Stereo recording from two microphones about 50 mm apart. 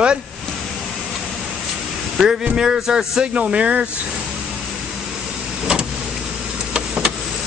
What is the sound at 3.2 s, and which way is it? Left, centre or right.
Speech, right.